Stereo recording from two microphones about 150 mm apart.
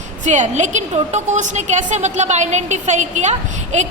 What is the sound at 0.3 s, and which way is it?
A woman's voice, 55° right (ahead or behind).